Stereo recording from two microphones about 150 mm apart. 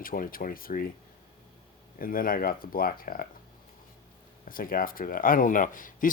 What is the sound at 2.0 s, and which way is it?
Speech, 70° left (ahead or behind).